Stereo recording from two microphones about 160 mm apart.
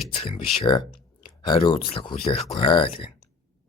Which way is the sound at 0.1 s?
35° left (ahead or behind).